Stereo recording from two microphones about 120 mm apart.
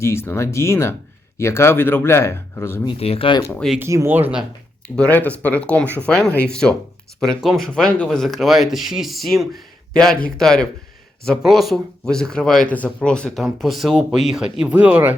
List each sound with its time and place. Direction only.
0.0 s speech: 20° left (ahead or behind)
3.0 s speech: 55° left (ahead or behind)
3.8 s speech: 20° right (ahead or behind)
4.9 s speech: 10° left (ahead or behind); by 15.1 s 15° right (ahead or behind)